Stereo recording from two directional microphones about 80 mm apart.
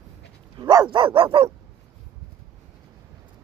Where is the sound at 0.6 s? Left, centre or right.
Right.